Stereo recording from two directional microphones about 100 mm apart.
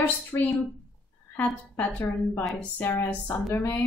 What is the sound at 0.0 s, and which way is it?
A woman's voice, 15° left (ahead or behind).